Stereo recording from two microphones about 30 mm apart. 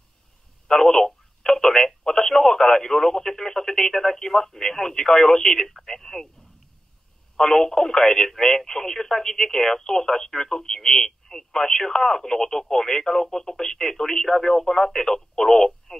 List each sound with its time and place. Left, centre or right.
0.7 s telephone: centre
2.0 s speech: centre
7.3 s speech: centre